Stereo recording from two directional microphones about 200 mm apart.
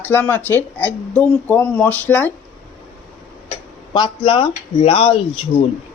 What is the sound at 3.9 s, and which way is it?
Speech, 20° left (ahead or behind).